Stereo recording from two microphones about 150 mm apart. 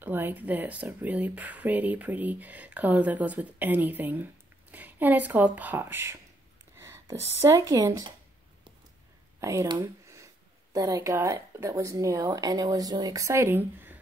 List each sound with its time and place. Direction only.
0.0 s speech: 15° right (ahead or behind)
9.4 s speech: 20° right (ahead or behind)